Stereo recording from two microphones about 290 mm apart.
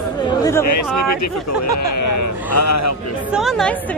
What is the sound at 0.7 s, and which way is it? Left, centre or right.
Speech, left.